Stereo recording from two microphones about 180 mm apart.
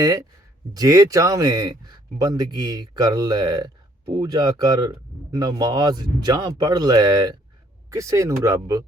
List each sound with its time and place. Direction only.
0.7 s a man's voice: 20° right (ahead or behind)